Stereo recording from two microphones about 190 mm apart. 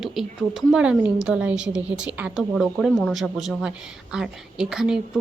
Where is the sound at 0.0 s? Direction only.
Centre (ahead or behind).